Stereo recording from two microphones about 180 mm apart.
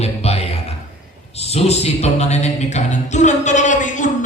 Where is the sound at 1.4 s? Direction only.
35° left (ahead or behind).